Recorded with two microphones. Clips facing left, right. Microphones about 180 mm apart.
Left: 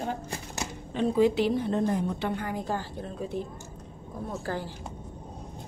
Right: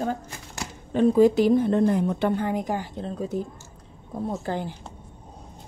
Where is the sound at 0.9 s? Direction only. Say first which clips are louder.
Right 6 dB; 45° right (ahead or behind).